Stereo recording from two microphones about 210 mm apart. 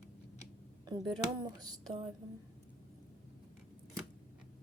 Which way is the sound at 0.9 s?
20° right (ahead or behind).